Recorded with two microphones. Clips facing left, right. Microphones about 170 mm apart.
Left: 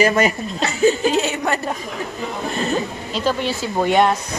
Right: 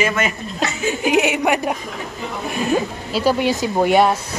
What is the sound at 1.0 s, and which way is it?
A woman's voice, 15° right (ahead or behind).